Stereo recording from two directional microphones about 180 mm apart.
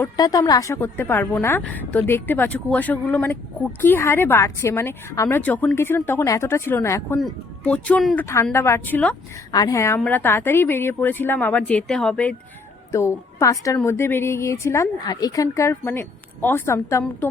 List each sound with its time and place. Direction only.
0.2 s speech: 20° left (ahead or behind)
9.5 s a woman's voice: 20° left (ahead or behind)